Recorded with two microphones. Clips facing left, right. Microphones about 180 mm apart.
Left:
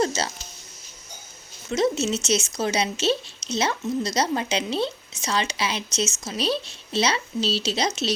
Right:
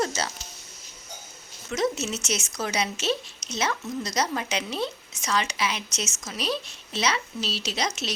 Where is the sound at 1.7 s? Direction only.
25° left (ahead or behind).